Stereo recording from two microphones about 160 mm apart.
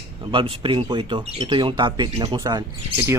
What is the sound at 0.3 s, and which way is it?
Speech, 35° right (ahead or behind).